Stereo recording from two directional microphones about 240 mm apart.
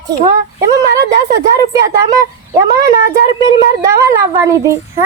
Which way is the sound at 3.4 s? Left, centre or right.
Centre.